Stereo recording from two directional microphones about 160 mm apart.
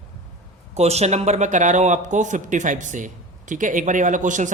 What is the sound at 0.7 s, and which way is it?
Speech, 40° right (ahead or behind).